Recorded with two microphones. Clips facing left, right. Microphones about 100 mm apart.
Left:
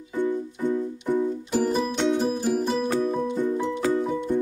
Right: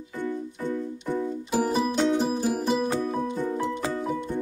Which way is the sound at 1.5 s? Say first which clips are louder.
Right 1 dB; 5° right (ahead or behind).